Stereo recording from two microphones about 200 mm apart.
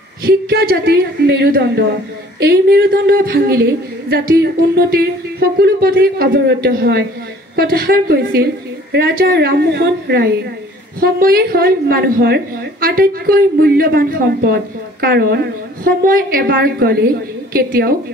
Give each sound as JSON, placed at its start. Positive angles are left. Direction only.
{"t": 0.2, "sound": "a woman's voice", "side_deg": -50}